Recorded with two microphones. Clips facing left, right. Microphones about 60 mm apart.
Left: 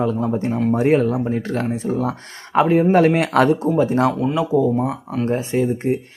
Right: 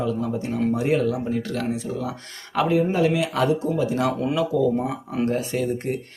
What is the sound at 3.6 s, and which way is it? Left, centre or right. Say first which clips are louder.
Speech: left 6 dB; left.